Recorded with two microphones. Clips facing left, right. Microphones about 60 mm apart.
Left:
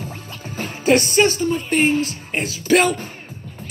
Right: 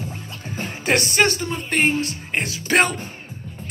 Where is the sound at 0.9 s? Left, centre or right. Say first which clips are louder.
Left 4 dB; right.